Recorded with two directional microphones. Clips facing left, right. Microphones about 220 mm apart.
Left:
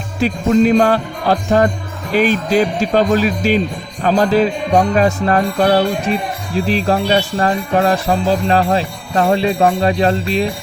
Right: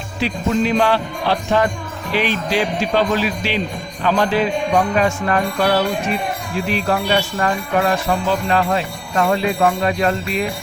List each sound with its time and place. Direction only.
0.2 s speech: 45° left (ahead or behind)
4.0 s music: 40° left (ahead or behind)